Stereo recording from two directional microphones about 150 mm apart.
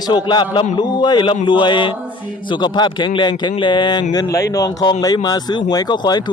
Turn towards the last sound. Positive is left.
turn(degrees=25)  # may be behind; listen again after turning